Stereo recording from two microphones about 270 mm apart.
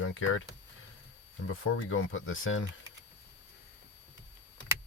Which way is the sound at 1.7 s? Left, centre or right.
Left.